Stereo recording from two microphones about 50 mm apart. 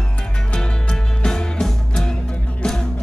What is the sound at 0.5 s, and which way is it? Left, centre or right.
Music, centre.